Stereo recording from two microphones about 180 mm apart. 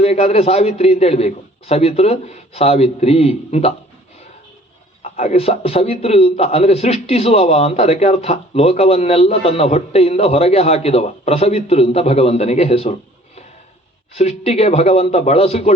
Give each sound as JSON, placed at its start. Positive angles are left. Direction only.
{"t": 0.0, "sound": "a man's voice", "side_deg": 35}
{"t": 5.1, "sound": "a man's voice", "side_deg": 35}